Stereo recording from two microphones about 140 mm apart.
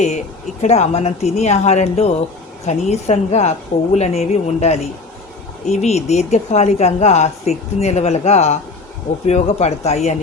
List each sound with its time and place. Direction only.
0.6 s speech: 55° left (ahead or behind)